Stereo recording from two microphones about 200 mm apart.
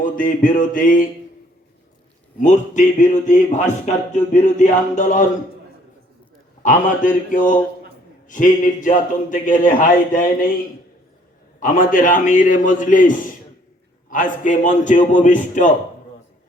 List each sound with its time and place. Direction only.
0.0 s a sound: 45° left (ahead or behind)
2.4 s speech: 40° left (ahead or behind)
6.6 s speech: 40° left (ahead or behind)
11.6 s speech: 45° left (ahead or behind)